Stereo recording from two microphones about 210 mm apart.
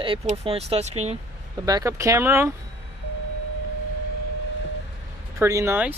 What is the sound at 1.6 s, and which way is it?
Speech, 15° right (ahead or behind).